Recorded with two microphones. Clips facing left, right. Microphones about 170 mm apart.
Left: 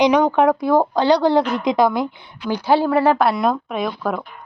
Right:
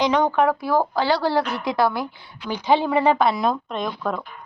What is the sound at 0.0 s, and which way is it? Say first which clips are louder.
Speech: left 4 dB; 15° left (ahead or behind).